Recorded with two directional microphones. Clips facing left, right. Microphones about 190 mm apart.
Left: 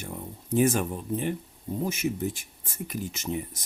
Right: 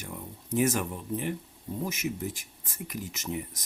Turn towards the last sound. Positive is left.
turn(degrees=25)  # may be behind; listen again after turning